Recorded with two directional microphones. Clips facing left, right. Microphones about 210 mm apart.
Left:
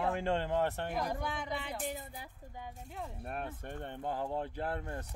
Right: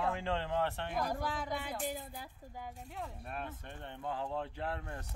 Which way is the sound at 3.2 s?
50° left (ahead or behind).